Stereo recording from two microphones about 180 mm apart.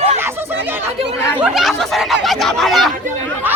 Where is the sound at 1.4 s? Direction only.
Centre (ahead or behind).